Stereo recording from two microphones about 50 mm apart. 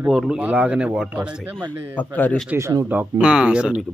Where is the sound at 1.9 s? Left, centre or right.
Left.